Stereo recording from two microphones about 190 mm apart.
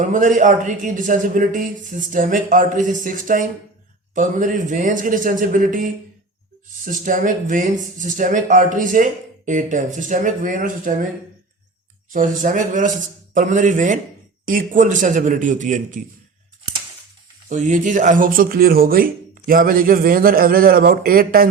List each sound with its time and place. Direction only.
0.0 s speech: 40° right (ahead or behind)
12.1 s a man's voice: 45° right (ahead or behind)
17.5 s speech: 40° right (ahead or behind)